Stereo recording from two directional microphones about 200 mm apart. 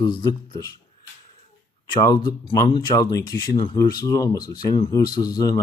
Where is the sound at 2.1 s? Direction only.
20° left (ahead or behind).